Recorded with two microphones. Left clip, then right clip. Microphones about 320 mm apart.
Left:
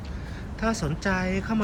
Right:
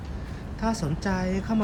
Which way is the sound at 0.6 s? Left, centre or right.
Centre.